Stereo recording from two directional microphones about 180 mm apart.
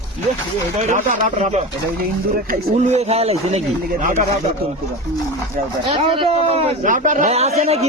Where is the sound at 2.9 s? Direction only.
35° right (ahead or behind).